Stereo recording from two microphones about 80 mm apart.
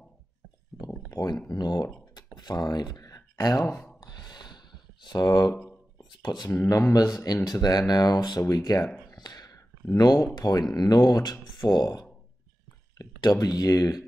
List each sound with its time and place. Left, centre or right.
1.1 s speech: left
2.1 s a sound: left
3.6 s speech: centre
4.0 s a sound: left
5.0 s speech: left
8.4 s speech: left
8.6 s speech: left
9.1 s a sound: left
9.9 s speech: left
13.2 s speech: left